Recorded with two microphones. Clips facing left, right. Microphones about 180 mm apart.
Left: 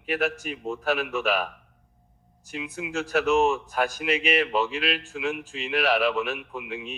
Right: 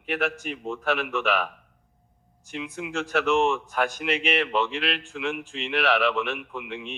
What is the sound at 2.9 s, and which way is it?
Speech, 40° left (ahead or behind).